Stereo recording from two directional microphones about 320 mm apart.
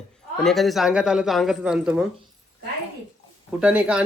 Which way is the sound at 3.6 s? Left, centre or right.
Centre.